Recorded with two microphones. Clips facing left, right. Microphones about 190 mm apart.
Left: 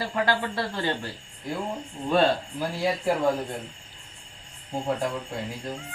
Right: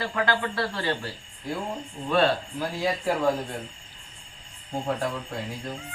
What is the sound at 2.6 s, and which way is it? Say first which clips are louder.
Speech: left 1 dB; 10° left (ahead or behind).